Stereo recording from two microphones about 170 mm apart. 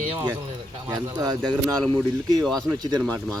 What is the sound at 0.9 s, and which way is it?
Speech, 20° right (ahead or behind).